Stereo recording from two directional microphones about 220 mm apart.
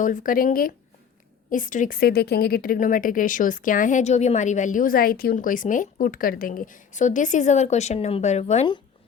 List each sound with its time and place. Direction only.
0.0 s speech: 40° left (ahead or behind)